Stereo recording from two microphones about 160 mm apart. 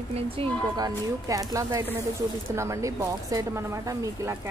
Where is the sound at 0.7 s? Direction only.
25° right (ahead or behind).